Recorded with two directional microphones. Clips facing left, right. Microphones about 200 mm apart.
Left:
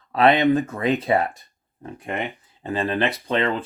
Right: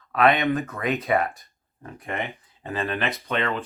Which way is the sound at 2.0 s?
15° left (ahead or behind).